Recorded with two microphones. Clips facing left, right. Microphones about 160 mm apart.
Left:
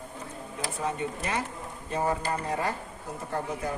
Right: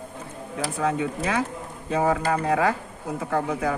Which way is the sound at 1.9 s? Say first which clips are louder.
Right 6 dB; 90° right.